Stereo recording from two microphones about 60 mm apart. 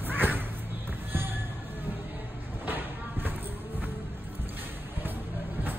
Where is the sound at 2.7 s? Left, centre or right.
Right.